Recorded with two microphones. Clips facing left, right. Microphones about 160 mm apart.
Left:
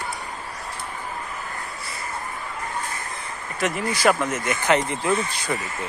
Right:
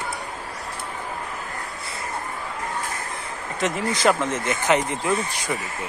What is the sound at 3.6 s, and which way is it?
Speech, 25° right (ahead or behind).